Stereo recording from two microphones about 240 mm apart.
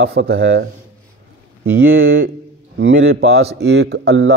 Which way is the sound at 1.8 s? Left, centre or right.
Right.